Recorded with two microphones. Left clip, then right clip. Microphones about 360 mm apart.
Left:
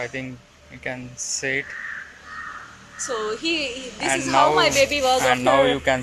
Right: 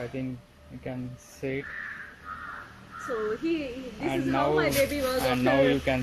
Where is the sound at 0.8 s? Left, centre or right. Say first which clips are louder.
Left 8 dB; left.